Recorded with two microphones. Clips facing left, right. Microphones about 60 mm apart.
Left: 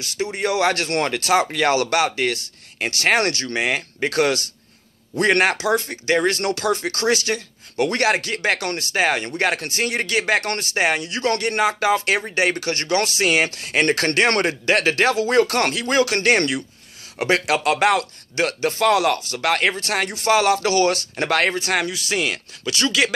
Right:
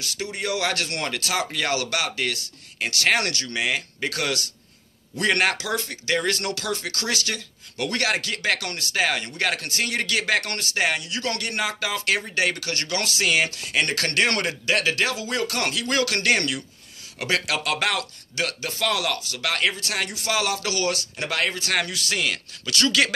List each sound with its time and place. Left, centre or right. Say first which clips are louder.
0.0 s speech: left 6 dB; left
21.7 s speech: left 3 dB; centre